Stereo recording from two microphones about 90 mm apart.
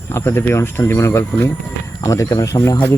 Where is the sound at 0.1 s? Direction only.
30° left (ahead or behind).